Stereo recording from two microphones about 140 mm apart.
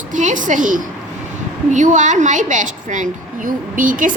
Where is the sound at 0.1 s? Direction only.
65° right (ahead or behind).